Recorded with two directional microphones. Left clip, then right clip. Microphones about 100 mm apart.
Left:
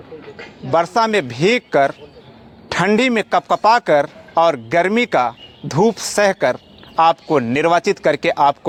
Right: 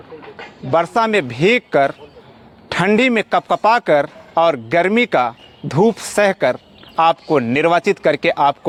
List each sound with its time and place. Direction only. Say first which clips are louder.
0.7 s speech: even; 35° right (ahead or behind)